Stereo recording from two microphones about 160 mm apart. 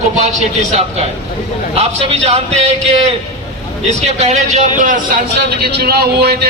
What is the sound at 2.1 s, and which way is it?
A man's voice, 40° right (ahead or behind).